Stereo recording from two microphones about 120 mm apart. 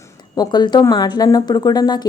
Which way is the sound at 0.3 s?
35° left (ahead or behind).